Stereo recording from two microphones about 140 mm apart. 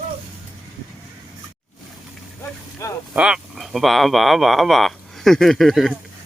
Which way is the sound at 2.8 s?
20° left (ahead or behind).